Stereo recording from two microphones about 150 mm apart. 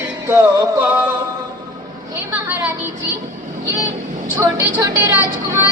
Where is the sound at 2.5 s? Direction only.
10° right (ahead or behind).